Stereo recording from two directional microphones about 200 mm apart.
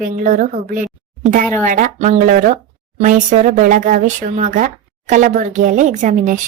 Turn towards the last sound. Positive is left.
turn(degrees=-40)  # may be behind; listen again after turning